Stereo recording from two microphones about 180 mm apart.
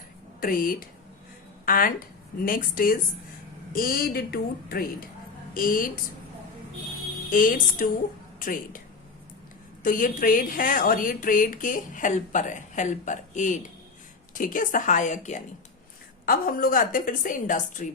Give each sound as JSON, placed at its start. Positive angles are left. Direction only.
{"t": 0.3, "sound": "a woman's voice", "side_deg": 55}
{"t": 7.3, "sound": "a woman's voice", "side_deg": 50}
{"t": 9.8, "sound": "a woman's voice", "side_deg": 50}
{"t": 16.2, "sound": "a woman's voice", "side_deg": 55}